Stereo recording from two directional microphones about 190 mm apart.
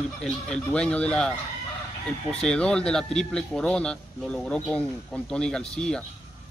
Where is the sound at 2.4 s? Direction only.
5° left (ahead or behind).